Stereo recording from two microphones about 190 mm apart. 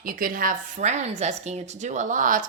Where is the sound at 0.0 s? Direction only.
45° right (ahead or behind).